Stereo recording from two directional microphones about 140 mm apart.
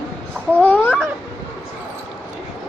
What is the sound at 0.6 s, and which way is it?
Babbling, 10° left (ahead or behind).